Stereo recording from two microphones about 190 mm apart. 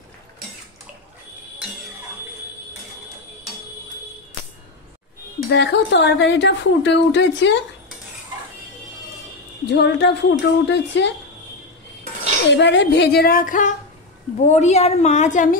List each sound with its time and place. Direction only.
5.5 s a woman's voice: 70° left (ahead or behind)
9.7 s a woman's voice: 65° left (ahead or behind)
12.4 s a woman's voice: 70° left (ahead or behind); by 15.5 s 40° left (ahead or behind)